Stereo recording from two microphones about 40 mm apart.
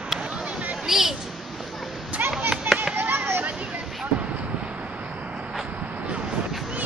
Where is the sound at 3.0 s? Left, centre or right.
Right.